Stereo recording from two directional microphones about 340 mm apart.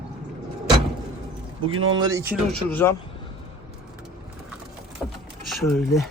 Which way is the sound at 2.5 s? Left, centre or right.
Centre.